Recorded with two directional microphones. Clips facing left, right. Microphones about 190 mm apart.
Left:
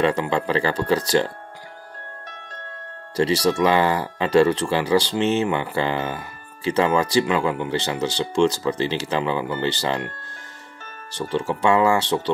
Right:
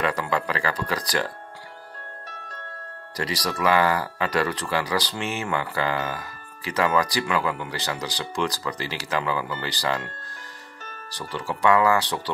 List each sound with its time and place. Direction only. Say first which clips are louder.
0.0 s speech: left 5 dB; 25° left (ahead or behind)
3.2 s speech: left 9 dB; 30° left (ahead or behind)
11.1 s speech: left 7 dB; 25° left (ahead or behind)